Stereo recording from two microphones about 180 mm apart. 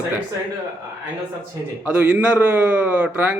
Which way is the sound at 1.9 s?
10° right (ahead or behind).